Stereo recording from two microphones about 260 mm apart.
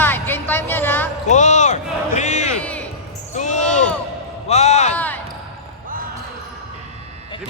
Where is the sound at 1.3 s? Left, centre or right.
Left.